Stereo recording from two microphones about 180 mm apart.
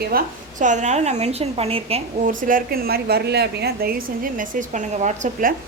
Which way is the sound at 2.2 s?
45° right (ahead or behind).